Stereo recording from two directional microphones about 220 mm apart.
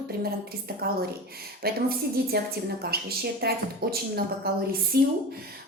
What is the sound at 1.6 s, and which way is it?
A woman's voice, 45° right (ahead or behind).